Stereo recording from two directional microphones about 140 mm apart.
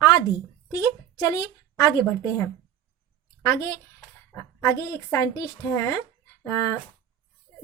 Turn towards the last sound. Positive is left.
turn(degrees=20)  # may be behind; listen again after turning